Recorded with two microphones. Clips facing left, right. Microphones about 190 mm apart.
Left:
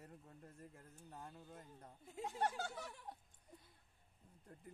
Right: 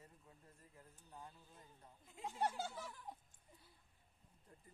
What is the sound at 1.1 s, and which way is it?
Speech, 75° left (ahead or behind).